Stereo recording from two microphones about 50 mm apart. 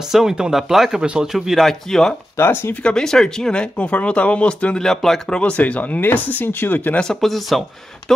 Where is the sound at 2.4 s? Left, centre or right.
Left.